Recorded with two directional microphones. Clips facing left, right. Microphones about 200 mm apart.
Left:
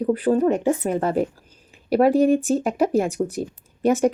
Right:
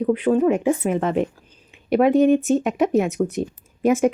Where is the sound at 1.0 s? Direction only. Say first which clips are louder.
Even; 5° left (ahead or behind).